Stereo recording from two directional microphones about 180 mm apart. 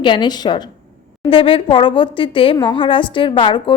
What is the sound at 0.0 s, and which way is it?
A woman's voice, 25° left (ahead or behind).